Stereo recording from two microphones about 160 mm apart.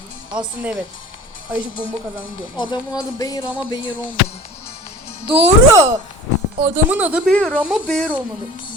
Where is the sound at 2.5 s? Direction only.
30° left (ahead or behind).